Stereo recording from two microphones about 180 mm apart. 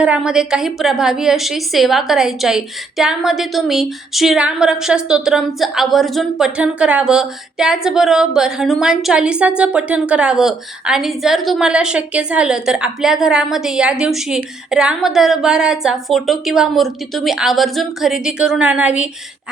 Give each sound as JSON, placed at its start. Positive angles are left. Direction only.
{"t": 0.0, "sound": "a woman's voice", "side_deg": -5}